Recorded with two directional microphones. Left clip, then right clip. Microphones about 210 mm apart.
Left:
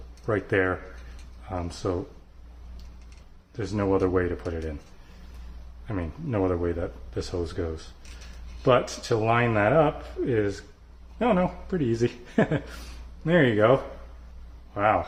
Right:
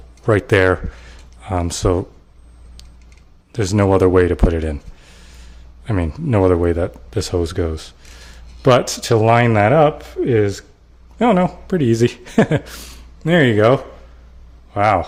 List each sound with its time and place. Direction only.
0.3 s speech: 55° right (ahead or behind)
3.5 s speech: 55° right (ahead or behind)
5.8 s a man's voice: 55° right (ahead or behind)